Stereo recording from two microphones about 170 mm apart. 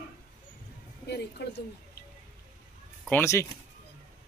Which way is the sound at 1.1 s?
75° left (ahead or behind).